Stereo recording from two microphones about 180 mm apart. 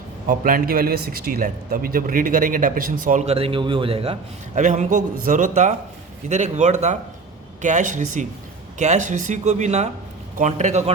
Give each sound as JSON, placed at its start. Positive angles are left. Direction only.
{"t": 0.3, "sound": "a man's voice", "side_deg": -50}